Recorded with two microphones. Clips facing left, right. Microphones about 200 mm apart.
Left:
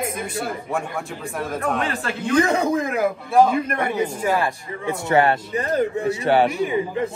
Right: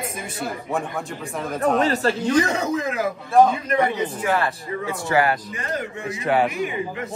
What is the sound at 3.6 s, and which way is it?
Speech, 55° left (ahead or behind).